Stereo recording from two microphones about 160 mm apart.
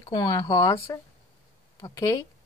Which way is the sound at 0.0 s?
25° left (ahead or behind).